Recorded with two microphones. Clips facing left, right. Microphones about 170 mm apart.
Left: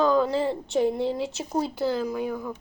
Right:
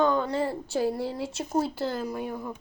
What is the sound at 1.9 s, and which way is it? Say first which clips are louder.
Speech: left 4 dB; centre (ahead or behind).